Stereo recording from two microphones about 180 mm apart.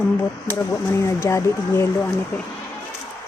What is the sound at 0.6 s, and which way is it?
Speech, 15° left (ahead or behind).